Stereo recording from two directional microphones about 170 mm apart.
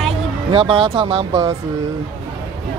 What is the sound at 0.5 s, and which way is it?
Speech, 30° right (ahead or behind).